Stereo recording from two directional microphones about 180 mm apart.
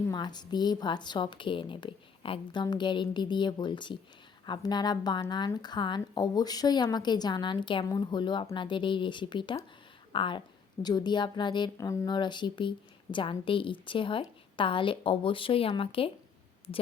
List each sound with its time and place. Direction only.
0.1 s speech: 25° left (ahead or behind)